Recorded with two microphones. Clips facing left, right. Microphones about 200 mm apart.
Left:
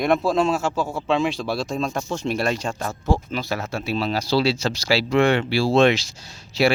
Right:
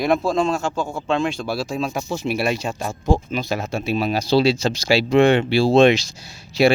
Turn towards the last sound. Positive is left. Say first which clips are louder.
# right 3 dB
turn(degrees=-10)  # may be behind; listen again after turning